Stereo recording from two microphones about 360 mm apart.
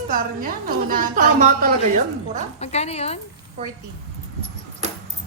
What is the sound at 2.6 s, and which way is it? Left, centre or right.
Speech, centre.